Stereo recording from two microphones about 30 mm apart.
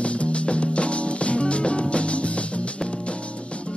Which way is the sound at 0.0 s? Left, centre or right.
Left.